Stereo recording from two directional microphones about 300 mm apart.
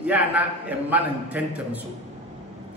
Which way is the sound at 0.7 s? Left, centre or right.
Centre.